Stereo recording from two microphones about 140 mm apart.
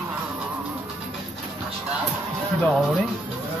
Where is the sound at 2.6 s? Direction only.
Centre (ahead or behind).